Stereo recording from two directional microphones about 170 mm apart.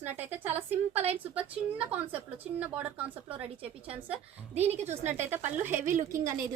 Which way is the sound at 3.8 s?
35° right (ahead or behind).